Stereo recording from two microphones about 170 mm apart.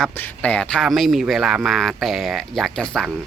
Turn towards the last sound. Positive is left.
turn(degrees=5)  # may be behind; listen again after turning